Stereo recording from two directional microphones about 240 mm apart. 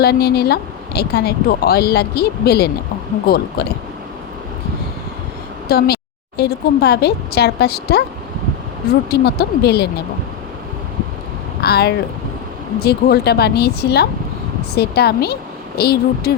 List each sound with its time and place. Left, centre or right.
0.0 s speech: left
5.6 s a woman's voice: left
11.6 s speech: left